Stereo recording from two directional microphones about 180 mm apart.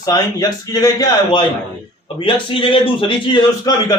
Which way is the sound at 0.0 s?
20° left (ahead or behind).